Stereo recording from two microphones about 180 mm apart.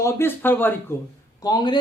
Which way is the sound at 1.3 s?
25° left (ahead or behind).